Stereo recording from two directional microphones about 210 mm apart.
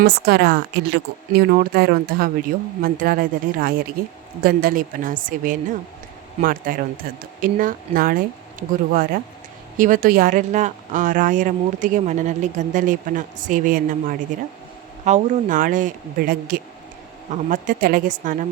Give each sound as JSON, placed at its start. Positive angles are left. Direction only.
{"t": 0.0, "sound": "a woman's voice", "side_deg": -50}